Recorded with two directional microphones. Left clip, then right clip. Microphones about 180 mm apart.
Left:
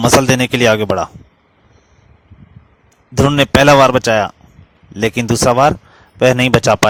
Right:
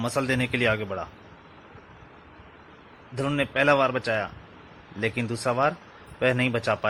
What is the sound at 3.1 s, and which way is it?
A man's voice, 55° left (ahead or behind).